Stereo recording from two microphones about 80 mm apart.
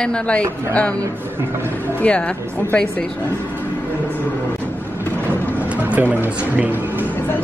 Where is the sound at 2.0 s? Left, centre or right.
Centre.